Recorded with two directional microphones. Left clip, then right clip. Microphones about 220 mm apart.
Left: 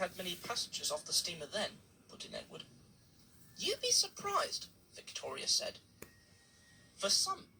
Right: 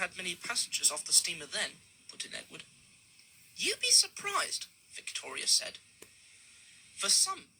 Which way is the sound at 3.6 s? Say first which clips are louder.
Right 5 dB; 45° right (ahead or behind).